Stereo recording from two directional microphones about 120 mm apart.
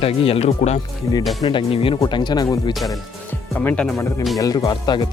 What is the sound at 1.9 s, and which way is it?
Speech, 35° left (ahead or behind).